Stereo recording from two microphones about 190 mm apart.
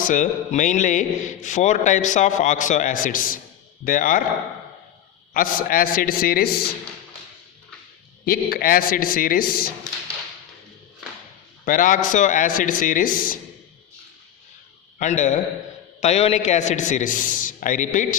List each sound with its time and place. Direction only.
0.0 s a man's voice: 45° left (ahead or behind)
5.3 s a man's voice: 50° left (ahead or behind)
8.2 s a man's voice: 50° left (ahead or behind)
11.6 s a man's voice: 45° left (ahead or behind)
14.9 s a man's voice: 40° left (ahead or behind)